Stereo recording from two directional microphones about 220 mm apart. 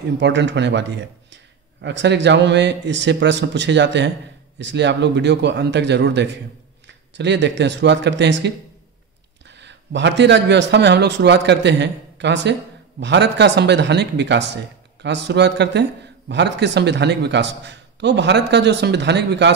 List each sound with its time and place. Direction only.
0.2 s speech: 50° right (ahead or behind)